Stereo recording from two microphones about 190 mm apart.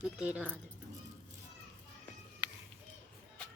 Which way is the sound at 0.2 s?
10° right (ahead or behind).